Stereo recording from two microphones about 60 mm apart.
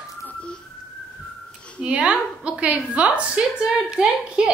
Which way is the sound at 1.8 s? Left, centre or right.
Centre.